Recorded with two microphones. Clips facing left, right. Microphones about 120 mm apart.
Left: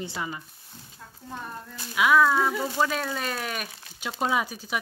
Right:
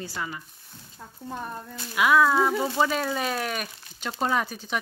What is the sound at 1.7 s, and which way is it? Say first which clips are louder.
Speech: even; centre (ahead or behind).